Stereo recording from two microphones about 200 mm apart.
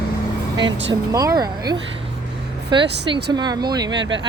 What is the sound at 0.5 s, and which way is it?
Speech, 20° right (ahead or behind).